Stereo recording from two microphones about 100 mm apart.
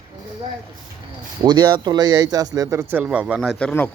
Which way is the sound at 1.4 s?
45° right (ahead or behind).